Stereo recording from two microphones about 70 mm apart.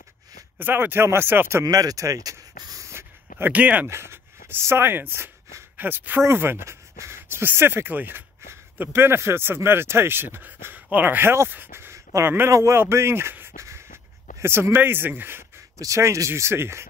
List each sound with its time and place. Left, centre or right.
0.6 s speech: right
1.6 s a sound: right
2.9 s a sound: right
3.5 s speech: centre
3.8 s speech: right
12.4 s speech: right
13.6 s a sound: right
14.4 s speech: right
15.8 s speech: right